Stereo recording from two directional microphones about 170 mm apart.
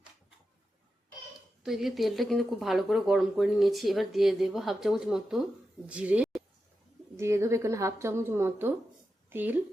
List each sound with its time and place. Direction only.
1.6 s a woman's voice: centre (ahead or behind)